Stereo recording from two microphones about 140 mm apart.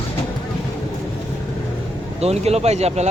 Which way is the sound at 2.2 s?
50° right (ahead or behind).